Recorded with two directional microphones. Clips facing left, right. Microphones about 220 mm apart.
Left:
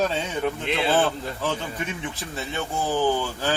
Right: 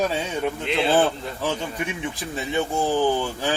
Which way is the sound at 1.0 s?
15° right (ahead or behind).